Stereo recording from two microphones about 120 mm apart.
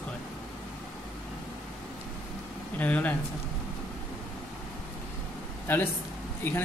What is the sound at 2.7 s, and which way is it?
Speech, 15° left (ahead or behind).